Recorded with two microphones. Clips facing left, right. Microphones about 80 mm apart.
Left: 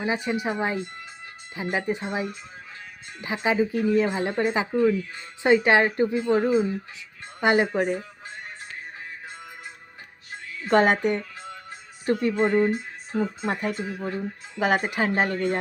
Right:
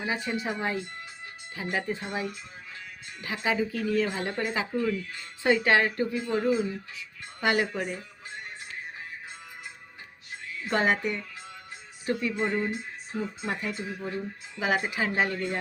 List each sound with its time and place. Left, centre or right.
0.0 s speech: left
1.7 s speech: left
10.6 s speech: left